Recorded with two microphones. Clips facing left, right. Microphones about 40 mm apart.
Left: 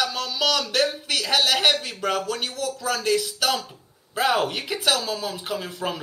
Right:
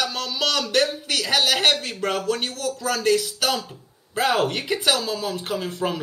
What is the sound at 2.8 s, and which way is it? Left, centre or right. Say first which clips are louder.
Speech: right 2 dB; centre.